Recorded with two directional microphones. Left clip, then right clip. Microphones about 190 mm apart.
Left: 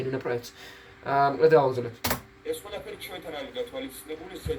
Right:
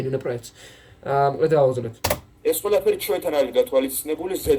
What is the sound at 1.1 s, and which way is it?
Speech, 5° left (ahead or behind).